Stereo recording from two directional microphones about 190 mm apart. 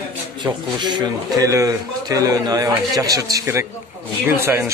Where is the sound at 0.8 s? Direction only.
25° right (ahead or behind).